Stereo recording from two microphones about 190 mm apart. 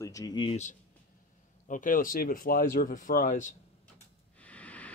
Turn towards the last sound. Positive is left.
turn(degrees=5)  # may be behind; listen again after turning